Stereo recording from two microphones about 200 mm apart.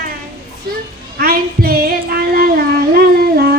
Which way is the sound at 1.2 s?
50° right (ahead or behind).